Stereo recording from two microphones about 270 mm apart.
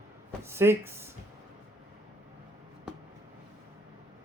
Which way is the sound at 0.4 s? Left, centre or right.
Centre.